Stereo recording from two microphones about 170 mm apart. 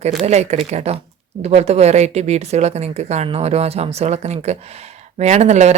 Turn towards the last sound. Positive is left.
turn(degrees=-40)  # may be behind; listen again after turning